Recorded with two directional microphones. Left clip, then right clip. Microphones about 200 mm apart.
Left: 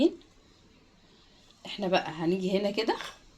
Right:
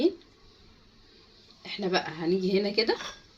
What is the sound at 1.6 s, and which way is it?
A woman's voice, 45° left (ahead or behind).